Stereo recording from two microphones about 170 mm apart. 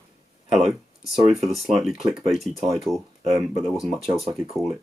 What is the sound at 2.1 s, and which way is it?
Speech, centre (ahead or behind).